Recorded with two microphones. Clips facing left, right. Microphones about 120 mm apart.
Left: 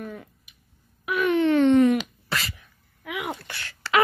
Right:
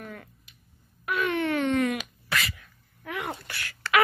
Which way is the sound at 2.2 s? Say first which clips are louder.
Even; 30° left (ahead or behind).